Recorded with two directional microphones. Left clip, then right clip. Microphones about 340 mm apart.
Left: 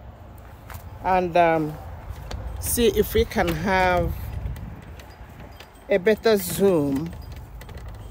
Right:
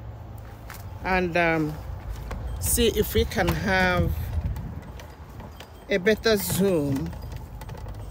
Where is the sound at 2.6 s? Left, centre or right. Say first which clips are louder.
Left 3 dB; centre.